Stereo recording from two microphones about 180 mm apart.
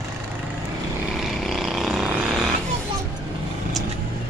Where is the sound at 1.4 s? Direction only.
Centre (ahead or behind).